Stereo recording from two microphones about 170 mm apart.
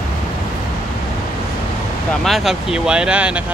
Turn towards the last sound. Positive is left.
turn(degrees=-5)  # may be behind; listen again after turning